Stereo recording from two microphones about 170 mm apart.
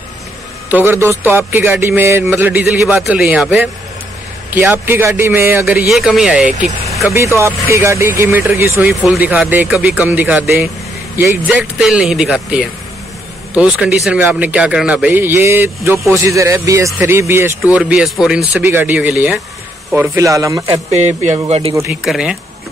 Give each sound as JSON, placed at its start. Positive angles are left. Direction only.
{"t": 0.7, "sound": "a man's voice", "side_deg": -10}
{"t": 7.2, "sound": "a man's voice", "side_deg": -15}
{"t": 20.2, "sound": "speech", "side_deg": -20}
{"t": 20.7, "sound": "speech", "side_deg": -40}
{"t": 22.0, "sound": "speech", "side_deg": -5}